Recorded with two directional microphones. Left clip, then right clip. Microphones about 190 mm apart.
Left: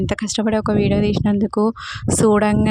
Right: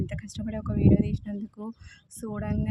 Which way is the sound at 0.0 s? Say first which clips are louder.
Left 16 dB; 55° left (ahead or behind).